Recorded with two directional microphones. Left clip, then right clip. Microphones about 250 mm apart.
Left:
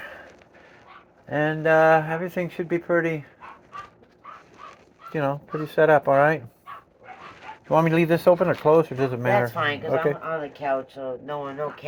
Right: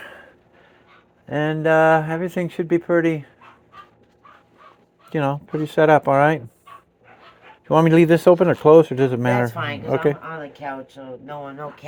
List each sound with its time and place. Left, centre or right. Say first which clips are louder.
1.3 s speech: right 2 dB; right
5.1 s speech: right 3 dB; right
7.7 s speech: right 5 dB; right
10.2 s speech: left 4 dB; centre